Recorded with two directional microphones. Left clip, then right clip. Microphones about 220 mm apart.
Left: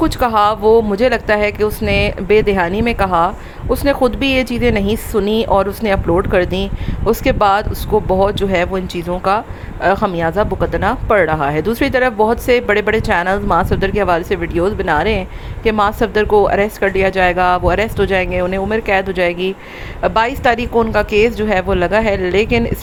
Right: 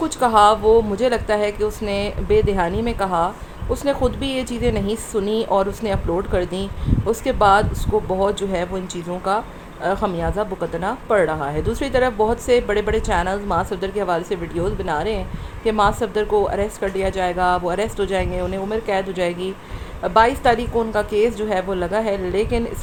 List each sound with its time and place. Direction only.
0.0 s speech: 25° left (ahead or behind)